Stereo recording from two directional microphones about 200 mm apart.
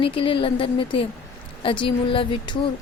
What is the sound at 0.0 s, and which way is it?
A woman's voice, 25° left (ahead or behind).